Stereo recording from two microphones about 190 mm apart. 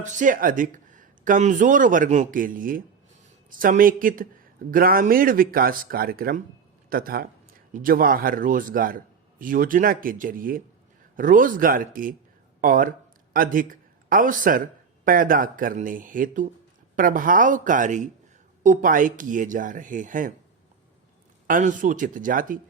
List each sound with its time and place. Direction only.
0.0 s speech: 40° right (ahead or behind)
21.4 s speech: 45° right (ahead or behind)